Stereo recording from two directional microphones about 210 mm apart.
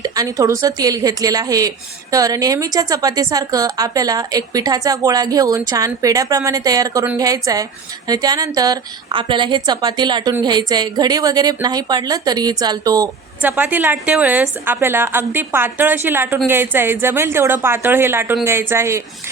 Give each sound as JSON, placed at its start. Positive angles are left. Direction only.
{"t": 0.0, "sound": "a woman's voice", "side_deg": -15}